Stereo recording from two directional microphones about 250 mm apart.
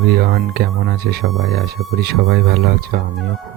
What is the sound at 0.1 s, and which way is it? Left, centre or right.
Speech, right.